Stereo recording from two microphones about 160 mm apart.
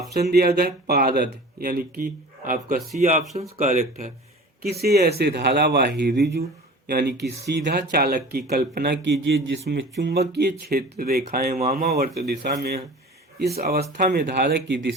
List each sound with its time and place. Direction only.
0.1 s speech: 85° right; by 2.8 s 55° right (ahead or behind)
3.0 s speech: 45° right (ahead or behind)
4.8 s speech: 80° right; by 11.9 s 60° right (ahead or behind)
12.0 s speech: 85° right
13.6 s speech: 75° right (ahead or behind)
13.9 s speech: 60° right (ahead or behind); by 14.9 s 85° right